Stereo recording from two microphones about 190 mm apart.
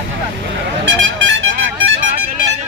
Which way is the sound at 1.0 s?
80° right.